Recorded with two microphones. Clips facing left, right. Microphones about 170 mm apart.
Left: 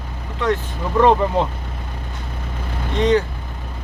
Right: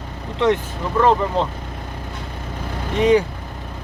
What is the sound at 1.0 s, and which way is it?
Speech, 15° left (ahead or behind).